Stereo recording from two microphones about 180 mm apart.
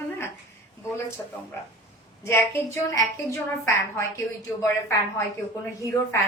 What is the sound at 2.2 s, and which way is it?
A woman's voice, 15° left (ahead or behind).